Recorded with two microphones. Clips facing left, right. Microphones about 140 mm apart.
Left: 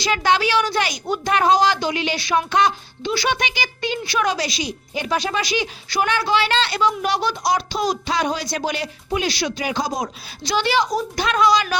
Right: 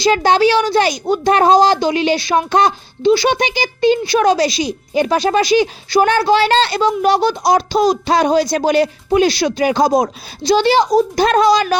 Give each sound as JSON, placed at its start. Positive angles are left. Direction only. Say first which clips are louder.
{"t": 0.0, "sound": "a woman's voice", "louder": "right 7 dB", "side_deg": -35}
{"t": 10.4, "sound": "a woman's voice", "louder": "right 8 dB", "side_deg": -30}